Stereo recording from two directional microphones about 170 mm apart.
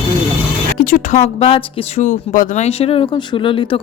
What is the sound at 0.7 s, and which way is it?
Speech, 50° left (ahead or behind).